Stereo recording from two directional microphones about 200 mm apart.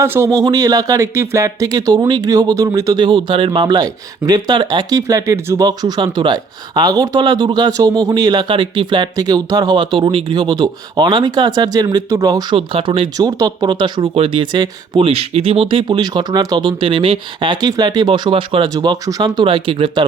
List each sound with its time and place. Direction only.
0.0 s speech: 15° right (ahead or behind)